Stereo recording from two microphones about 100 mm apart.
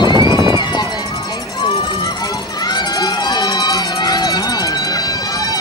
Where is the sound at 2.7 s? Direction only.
45° left (ahead or behind).